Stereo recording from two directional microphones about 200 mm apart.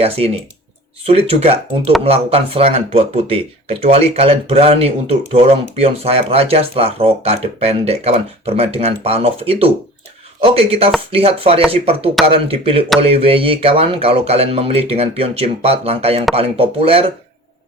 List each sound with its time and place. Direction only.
1.0 s speech: 30° right (ahead or behind)